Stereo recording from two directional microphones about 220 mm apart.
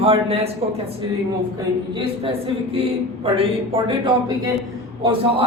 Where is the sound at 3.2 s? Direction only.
25° right (ahead or behind).